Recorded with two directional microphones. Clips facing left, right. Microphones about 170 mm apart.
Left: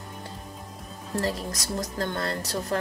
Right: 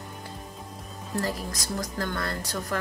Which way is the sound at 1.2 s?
30° left (ahead or behind).